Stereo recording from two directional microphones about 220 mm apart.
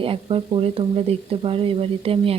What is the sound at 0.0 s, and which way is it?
Speech, 25° right (ahead or behind).